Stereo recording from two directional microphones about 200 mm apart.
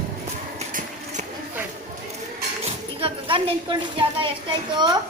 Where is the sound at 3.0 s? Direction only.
25° right (ahead or behind).